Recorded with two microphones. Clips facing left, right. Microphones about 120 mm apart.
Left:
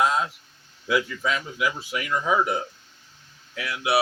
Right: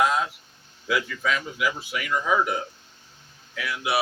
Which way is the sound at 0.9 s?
25° left (ahead or behind).